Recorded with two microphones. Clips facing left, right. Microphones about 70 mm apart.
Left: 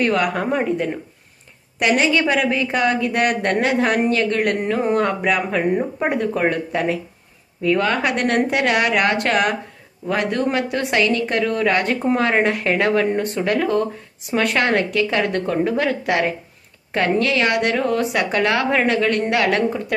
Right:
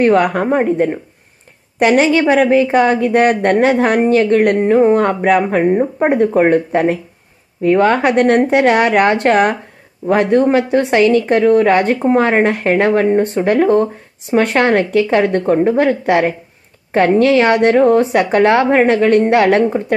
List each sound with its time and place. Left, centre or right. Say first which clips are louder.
0.0 s a woman's voice: right 7 dB; right
5.7 s speech: right 6 dB; right
6.0 s a woman's voice: right 9 dB; right